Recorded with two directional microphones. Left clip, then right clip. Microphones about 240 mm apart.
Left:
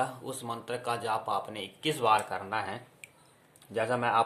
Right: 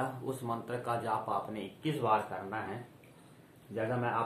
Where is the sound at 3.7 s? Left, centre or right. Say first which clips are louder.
Left 6 dB; left.